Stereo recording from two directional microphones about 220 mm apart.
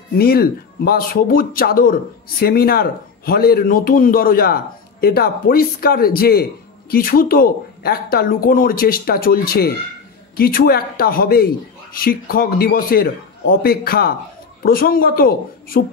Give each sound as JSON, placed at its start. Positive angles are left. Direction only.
{"t": 0.2, "sound": "a man's voice", "side_deg": 45}